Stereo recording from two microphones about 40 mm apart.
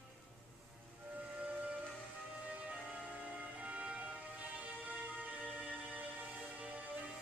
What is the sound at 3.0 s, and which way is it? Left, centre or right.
Music, right.